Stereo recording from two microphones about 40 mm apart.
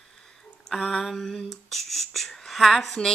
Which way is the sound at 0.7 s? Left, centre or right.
Centre.